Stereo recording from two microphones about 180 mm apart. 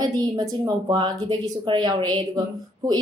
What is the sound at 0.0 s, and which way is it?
A woman's voice, 20° right (ahead or behind).